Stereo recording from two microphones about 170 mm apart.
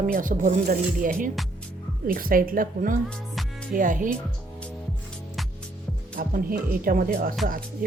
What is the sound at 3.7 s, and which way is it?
Speech, 50° right (ahead or behind).